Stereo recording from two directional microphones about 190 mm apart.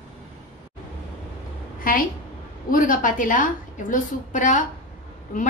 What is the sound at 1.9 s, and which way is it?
A woman's voice, 45° left (ahead or behind).